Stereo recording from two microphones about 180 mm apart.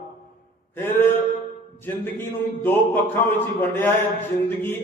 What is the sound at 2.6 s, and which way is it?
Speech, 10° left (ahead or behind).